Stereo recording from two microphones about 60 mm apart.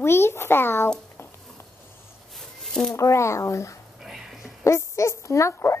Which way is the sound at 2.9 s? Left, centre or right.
Left.